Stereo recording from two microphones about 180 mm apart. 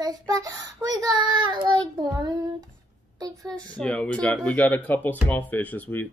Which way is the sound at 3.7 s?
5° left (ahead or behind).